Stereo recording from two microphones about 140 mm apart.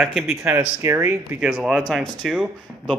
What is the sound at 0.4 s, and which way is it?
Speech, 20° right (ahead or behind).